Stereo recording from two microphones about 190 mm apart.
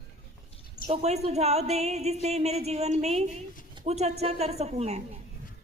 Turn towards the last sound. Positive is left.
turn(degrees=-35)  # may be behind; listen again after turning